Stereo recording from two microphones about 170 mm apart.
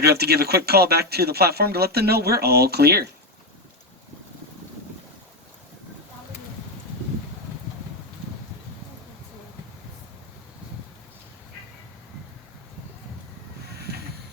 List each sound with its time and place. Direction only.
0.0 s speech: 70° right (ahead or behind)